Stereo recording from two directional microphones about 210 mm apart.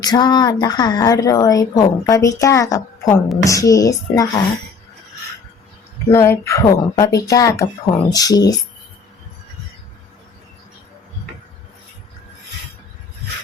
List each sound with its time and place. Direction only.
0.0 s a woman's voice: 20° left (ahead or behind)
6.1 s a woman's voice: 10° left (ahead or behind)